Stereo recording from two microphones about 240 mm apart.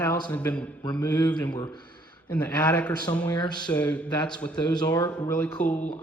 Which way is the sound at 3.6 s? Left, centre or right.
Centre.